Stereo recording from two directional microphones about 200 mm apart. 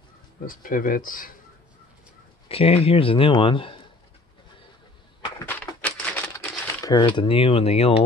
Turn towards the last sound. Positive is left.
turn(degrees=30)  # may be behind; listen again after turning